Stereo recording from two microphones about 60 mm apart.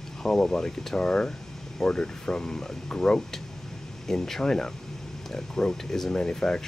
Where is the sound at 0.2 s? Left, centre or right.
Centre.